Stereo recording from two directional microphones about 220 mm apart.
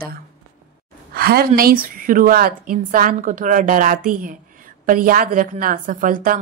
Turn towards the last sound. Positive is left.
turn(degrees=-40)  # may be behind; listen again after turning